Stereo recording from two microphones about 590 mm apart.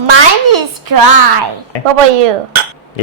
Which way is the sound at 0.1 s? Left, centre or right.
Right.